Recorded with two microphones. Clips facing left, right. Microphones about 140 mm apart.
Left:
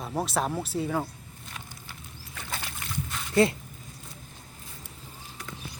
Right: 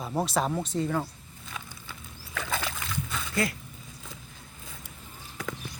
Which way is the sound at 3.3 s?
25° left (ahead or behind).